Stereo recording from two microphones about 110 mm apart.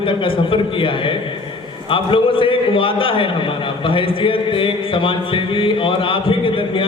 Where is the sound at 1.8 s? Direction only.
50° left (ahead or behind).